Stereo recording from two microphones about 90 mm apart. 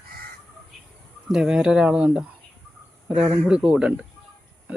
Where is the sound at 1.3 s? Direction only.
5° right (ahead or behind).